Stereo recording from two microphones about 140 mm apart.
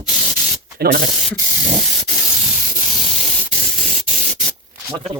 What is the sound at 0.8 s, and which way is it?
Speech, 90° right.